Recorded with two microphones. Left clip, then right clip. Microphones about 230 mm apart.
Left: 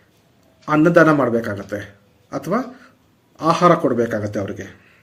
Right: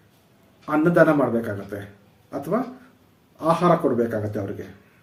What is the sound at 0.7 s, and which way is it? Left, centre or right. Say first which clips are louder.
Speech: left 4 dB; left.